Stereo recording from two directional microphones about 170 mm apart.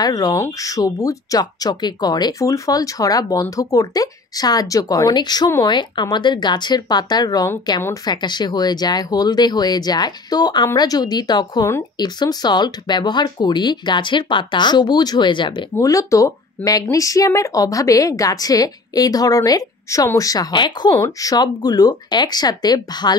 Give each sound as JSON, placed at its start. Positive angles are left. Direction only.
{"t": 0.0, "sound": "speech", "side_deg": 20}